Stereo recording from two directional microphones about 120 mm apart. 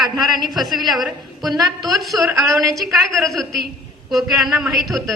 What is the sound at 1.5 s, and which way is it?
Speech, 30° right (ahead or behind).